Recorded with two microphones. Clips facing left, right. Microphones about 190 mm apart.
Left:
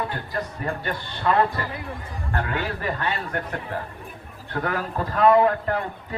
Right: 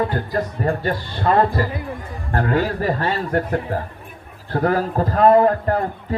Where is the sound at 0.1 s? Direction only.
40° right (ahead or behind).